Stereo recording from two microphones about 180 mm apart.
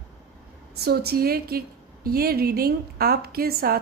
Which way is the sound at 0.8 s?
60° right (ahead or behind).